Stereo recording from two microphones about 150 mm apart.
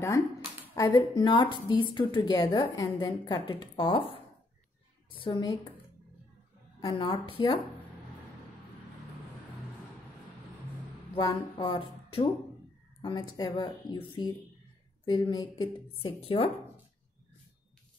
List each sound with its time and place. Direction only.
0.7 s a woman's voice: 25° left (ahead or behind)
5.2 s speech: 35° left (ahead or behind)
6.8 s a woman's voice: 35° left (ahead or behind)
11.2 s speech: 30° left (ahead or behind)